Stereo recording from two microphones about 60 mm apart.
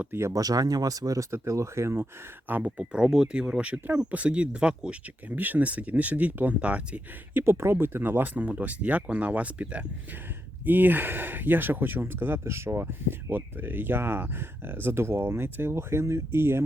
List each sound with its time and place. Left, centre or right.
0.1 s speech: right
0.3 s speech: right
1.3 s speech: right
2.5 s speech: right
5.3 s speech: right
7.4 s speech: right
8.3 s speech: right